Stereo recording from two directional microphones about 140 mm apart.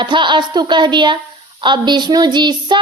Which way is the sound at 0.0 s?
35° right (ahead or behind).